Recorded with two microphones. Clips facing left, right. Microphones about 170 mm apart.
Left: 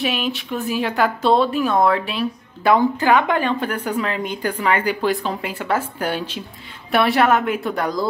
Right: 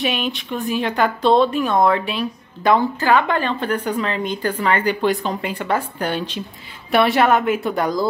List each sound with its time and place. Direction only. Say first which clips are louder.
0.0 s a woman's voice: even; centre (ahead or behind)